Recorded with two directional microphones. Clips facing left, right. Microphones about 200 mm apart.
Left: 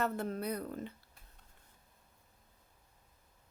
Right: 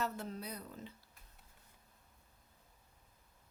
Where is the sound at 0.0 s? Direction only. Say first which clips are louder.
Left 6 dB; 55° left (ahead or behind).